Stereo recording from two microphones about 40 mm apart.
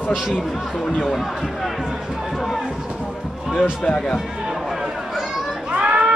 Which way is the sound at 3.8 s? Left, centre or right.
Left.